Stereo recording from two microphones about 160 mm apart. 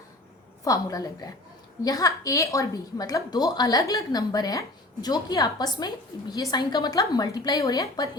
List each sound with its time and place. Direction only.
0.6 s a woman's voice: 20° left (ahead or behind)